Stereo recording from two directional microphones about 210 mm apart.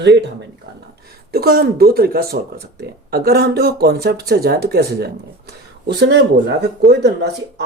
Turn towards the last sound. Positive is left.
turn(degrees=-55)  # may be behind; listen again after turning